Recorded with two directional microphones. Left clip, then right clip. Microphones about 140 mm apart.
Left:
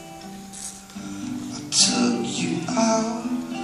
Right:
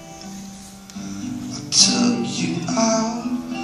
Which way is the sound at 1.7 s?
10° left (ahead or behind).